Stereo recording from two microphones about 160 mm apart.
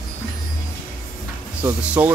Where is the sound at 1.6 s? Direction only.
10° right (ahead or behind).